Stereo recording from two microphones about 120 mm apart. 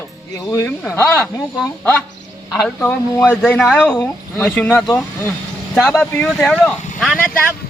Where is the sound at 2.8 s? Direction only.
20° left (ahead or behind).